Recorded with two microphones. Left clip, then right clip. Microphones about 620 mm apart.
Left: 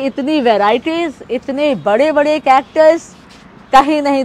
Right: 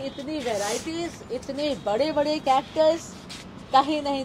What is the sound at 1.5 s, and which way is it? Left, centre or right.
A woman's voice, left.